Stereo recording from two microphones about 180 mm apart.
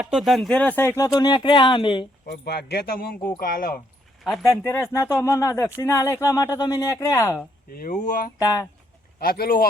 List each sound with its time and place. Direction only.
0.0 s speech: centre (ahead or behind); by 2.0 s 25° left (ahead or behind)
2.2 s speech: 65° left (ahead or behind)
4.6 s speech: 15° left (ahead or behind)
7.7 s speech: 55° left (ahead or behind)